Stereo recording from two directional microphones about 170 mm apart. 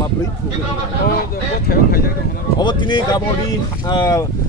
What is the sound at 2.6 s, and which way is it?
Speech, 25° left (ahead or behind).